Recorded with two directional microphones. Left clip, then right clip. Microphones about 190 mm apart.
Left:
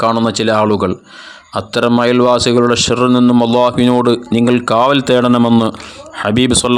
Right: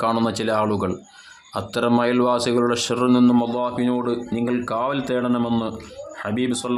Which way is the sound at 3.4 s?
45° left (ahead or behind).